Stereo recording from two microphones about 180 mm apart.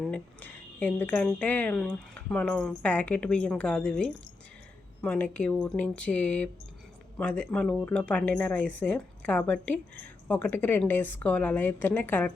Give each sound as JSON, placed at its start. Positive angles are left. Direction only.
{"t": 0.0, "sound": "speech", "side_deg": 5}